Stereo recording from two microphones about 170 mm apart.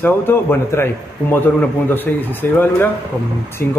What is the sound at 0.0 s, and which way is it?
A man's voice, 10° left (ahead or behind).